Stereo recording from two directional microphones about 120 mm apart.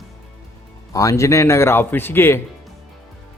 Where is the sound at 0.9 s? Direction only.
25° left (ahead or behind).